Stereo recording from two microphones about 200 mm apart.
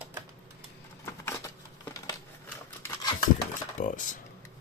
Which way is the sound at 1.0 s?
15° left (ahead or behind).